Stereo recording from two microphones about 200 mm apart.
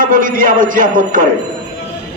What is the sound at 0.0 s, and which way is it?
A man's voice, 45° right (ahead or behind).